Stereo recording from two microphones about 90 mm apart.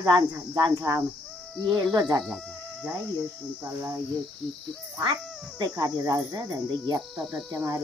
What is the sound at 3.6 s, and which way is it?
Speech, 25° right (ahead or behind).